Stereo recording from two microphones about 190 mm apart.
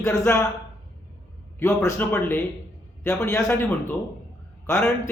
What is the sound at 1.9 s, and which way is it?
A man's voice, 10° left (ahead or behind).